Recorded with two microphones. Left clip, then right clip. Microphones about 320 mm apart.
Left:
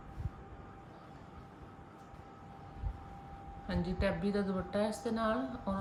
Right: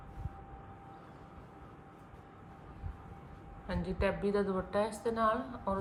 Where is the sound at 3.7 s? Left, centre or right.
Centre.